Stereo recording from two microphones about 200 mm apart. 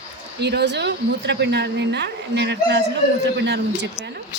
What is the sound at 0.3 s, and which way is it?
A woman's voice, 55° right (ahead or behind).